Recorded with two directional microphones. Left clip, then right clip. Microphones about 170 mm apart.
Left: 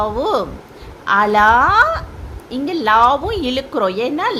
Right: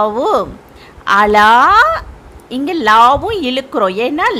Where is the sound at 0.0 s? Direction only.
25° right (ahead or behind).